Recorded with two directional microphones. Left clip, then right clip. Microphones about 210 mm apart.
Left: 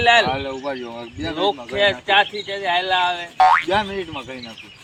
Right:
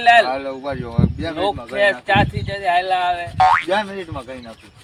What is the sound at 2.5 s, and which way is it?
Speech, 30° right (ahead or behind).